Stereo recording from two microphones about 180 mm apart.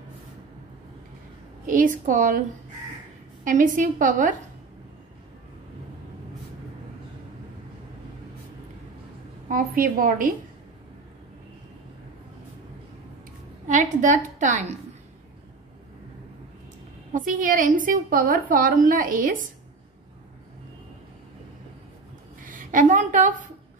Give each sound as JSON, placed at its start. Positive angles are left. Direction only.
{"t": 1.7, "sound": "a woman's voice", "side_deg": -50}
{"t": 3.4, "sound": "a woman's voice", "side_deg": -45}
{"t": 9.5, "sound": "a woman's voice", "side_deg": -50}
{"t": 13.7, "sound": "a woman's voice", "side_deg": -45}
{"t": 17.1, "sound": "a woman's voice", "side_deg": -50}
{"t": 22.4, "sound": "a woman's voice", "side_deg": -50}